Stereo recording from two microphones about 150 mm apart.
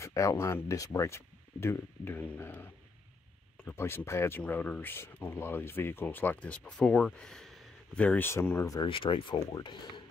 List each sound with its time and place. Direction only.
0.0 s speech: 20° left (ahead or behind)
8.8 s speech: 35° left (ahead or behind)